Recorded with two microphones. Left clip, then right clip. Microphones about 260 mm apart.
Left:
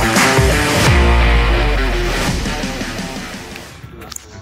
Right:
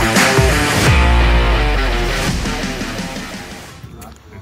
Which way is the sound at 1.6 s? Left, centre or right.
Centre.